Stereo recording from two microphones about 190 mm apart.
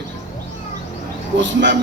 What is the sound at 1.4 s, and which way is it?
Speech, 70° right (ahead or behind).